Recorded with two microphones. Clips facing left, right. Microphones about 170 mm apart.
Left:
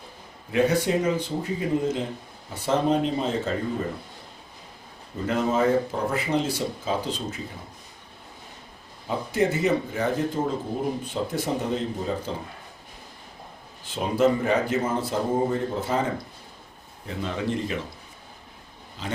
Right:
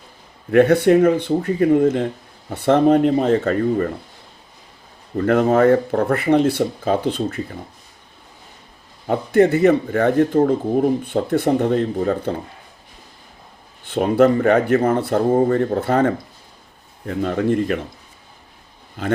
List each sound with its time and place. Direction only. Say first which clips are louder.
0.5 s speech: right 9 dB; 60° right (ahead or behind)
5.1 s speech: right 9 dB; 60° right (ahead or behind)
9.0 s speech: right 9 dB; 60° right (ahead or behind)
13.8 s speech: right 7 dB; 60° right (ahead or behind)
19.0 s speech: right 11 dB; 55° right (ahead or behind)